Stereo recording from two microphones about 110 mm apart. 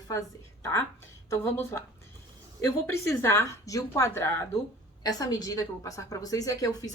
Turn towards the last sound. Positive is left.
turn(degrees=30)  # may be behind; listen again after turning